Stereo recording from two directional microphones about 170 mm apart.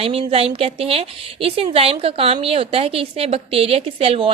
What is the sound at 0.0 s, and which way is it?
A woman's voice, 35° right (ahead or behind).